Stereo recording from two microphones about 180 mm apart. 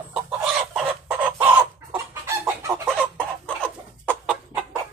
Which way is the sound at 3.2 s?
5° left (ahead or behind).